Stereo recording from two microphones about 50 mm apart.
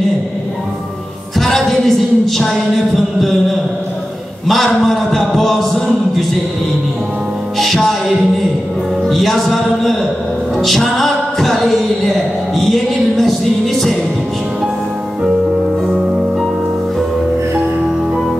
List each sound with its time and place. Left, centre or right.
1.4 s music: centre
7.5 s music: centre
9.0 s music: centre